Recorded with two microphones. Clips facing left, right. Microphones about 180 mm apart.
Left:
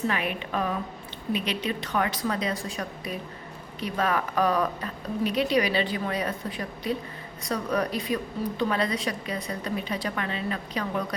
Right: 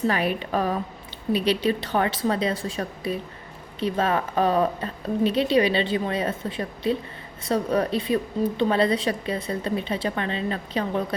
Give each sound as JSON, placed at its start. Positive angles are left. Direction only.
{"t": 0.1, "sound": "a woman's voice", "side_deg": -35}